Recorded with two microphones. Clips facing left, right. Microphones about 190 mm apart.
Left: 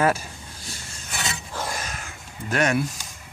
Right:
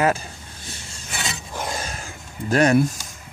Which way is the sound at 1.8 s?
30° right (ahead or behind).